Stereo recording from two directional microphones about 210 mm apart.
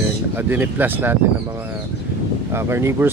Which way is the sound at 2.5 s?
10° right (ahead or behind).